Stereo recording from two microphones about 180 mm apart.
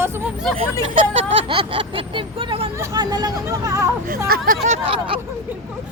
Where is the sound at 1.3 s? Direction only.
30° right (ahead or behind).